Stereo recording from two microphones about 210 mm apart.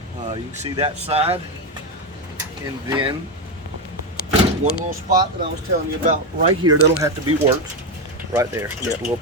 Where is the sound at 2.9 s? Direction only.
25° right (ahead or behind).